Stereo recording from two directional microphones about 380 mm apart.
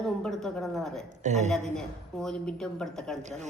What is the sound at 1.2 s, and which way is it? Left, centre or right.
Speech, centre.